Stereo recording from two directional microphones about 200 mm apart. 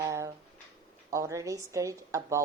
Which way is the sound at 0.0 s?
15° right (ahead or behind).